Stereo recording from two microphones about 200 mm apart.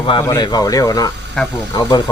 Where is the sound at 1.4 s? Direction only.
5° left (ahead or behind).